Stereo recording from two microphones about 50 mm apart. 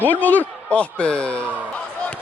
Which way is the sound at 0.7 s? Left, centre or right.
Left.